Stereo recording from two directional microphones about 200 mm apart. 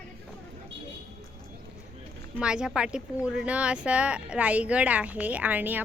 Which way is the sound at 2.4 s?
5° right (ahead or behind).